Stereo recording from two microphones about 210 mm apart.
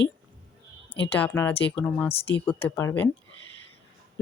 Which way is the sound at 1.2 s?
10° left (ahead or behind).